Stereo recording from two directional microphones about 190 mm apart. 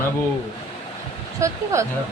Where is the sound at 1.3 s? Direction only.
15° right (ahead or behind).